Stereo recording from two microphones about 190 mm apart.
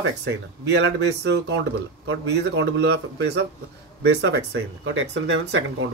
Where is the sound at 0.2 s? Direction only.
65° right (ahead or behind).